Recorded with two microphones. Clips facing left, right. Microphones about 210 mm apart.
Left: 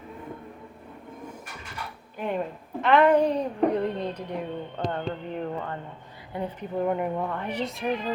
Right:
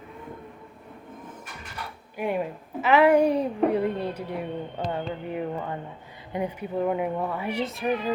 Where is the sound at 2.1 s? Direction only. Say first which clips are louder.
Right 2 dB; 10° right (ahead or behind).